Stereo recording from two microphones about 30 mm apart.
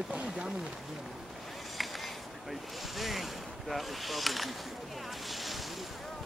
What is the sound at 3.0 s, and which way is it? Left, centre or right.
Speech, centre.